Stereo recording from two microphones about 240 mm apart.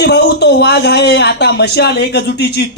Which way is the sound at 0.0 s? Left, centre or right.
Left.